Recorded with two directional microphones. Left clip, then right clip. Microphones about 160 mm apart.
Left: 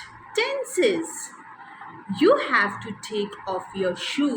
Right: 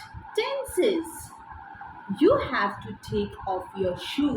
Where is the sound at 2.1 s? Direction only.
60° left (ahead or behind).